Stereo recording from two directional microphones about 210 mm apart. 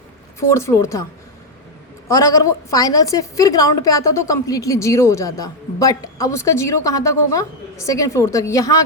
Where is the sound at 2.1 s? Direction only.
15° left (ahead or behind).